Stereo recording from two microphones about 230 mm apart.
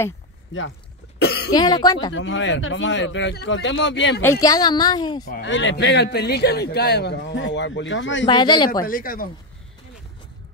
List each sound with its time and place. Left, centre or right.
0.5 s speech: left
1.2 s cough: left
1.5 s a woman's voice: centre
2.1 s a man's voice: left
4.2 s a woman's voice: centre
5.3 s a man's voice: left
8.3 s speech: centre
8.8 s speech: left